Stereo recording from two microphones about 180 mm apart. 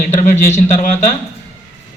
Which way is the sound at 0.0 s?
40° left (ahead or behind).